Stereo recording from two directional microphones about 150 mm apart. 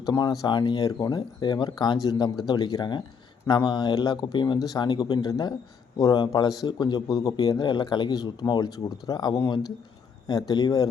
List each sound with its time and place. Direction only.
0.0 s speech: 25° left (ahead or behind)